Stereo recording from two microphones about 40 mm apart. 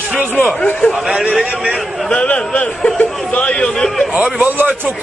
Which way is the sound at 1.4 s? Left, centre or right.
Right.